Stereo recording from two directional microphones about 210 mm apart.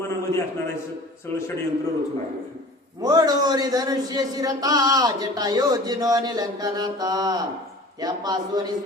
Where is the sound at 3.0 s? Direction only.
20° right (ahead or behind).